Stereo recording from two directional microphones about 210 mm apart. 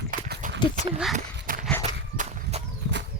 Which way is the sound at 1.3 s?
40° right (ahead or behind).